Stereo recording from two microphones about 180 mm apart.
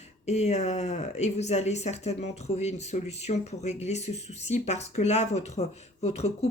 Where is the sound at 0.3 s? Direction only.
40° left (ahead or behind).